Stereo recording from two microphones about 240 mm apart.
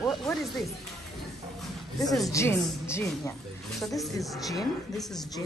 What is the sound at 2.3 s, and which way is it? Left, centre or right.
Speech, centre.